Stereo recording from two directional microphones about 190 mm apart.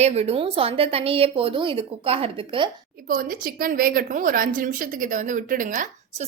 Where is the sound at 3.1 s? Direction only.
50° right (ahead or behind).